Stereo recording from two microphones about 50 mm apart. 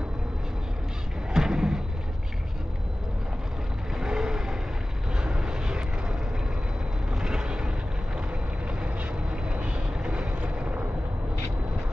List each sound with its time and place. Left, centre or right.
1.3 s a sound: centre
3.9 s vehicle: centre
7.1 s vehicle: centre
9.5 s vehicle: right